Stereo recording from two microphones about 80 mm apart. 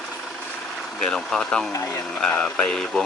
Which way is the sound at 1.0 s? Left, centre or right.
Centre.